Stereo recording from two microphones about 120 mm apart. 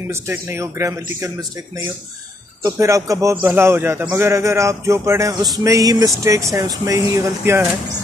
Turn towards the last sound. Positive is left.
turn(degrees=-20)  # may be behind; listen again after turning